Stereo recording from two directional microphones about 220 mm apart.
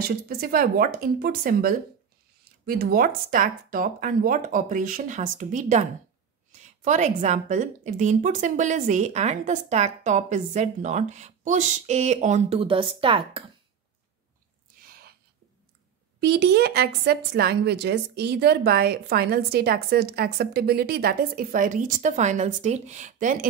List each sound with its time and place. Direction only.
0.0 s a woman's voice: 45° right (ahead or behind); by 13.4 s 25° right (ahead or behind)
16.2 s speech: 50° right (ahead or behind)